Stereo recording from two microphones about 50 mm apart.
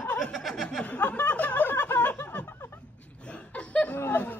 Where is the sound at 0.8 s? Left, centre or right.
Left.